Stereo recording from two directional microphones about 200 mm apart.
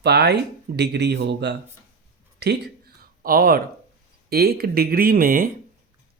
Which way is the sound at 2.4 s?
55° right (ahead or behind).